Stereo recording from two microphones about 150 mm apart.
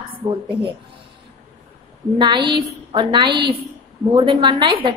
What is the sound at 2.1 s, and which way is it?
A woman's voice, 30° right (ahead or behind).